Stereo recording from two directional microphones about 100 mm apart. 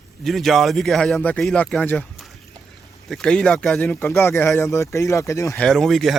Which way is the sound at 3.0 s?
5° left (ahead or behind).